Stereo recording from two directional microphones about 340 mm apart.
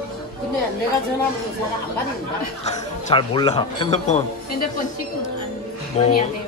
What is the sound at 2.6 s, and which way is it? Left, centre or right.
A man's voice, centre.